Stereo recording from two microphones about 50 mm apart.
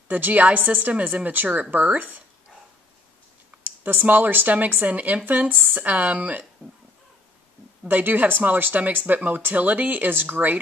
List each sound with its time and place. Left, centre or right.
0.1 s speech: right
3.8 s speech: right
7.9 s speech: right